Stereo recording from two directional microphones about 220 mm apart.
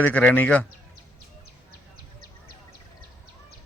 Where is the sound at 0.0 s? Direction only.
5° left (ahead or behind).